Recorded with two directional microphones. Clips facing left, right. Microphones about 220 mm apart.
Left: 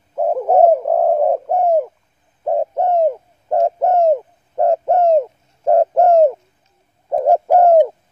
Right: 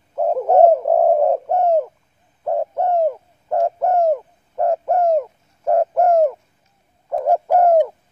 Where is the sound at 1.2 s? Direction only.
10° left (ahead or behind).